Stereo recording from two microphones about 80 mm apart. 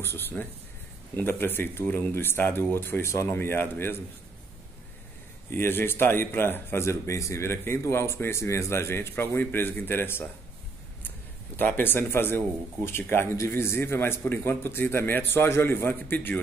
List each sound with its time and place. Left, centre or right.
0.0 s speech: left
5.5 s a man's voice: left